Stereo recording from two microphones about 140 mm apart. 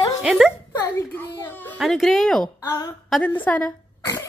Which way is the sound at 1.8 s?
Centre (ahead or behind).